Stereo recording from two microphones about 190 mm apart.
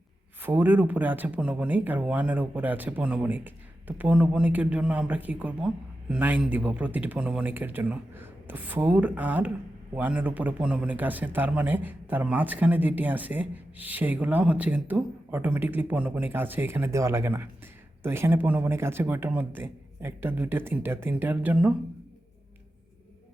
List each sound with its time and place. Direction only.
0.4 s speech: 10° right (ahead or behind)